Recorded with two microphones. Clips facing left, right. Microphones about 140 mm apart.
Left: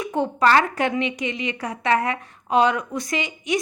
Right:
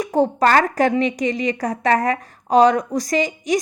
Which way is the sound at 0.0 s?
40° right (ahead or behind).